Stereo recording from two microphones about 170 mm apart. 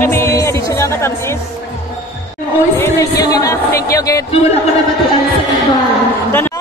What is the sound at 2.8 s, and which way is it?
Speech, 15° left (ahead or behind).